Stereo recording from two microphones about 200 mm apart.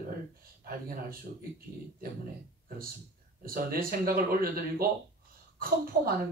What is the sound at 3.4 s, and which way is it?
Speech, 45° right (ahead or behind).